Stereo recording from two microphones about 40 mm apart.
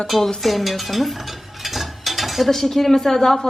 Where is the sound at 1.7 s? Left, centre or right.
Centre.